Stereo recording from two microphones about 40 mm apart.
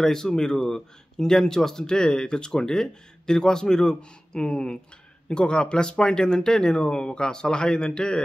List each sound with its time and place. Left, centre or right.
0.0 s speech: centre